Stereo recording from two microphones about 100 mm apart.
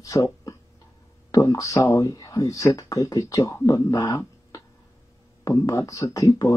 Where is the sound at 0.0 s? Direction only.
35° left (ahead or behind).